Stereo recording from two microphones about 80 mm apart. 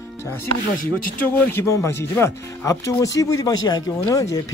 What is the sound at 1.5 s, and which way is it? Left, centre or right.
Speech, left.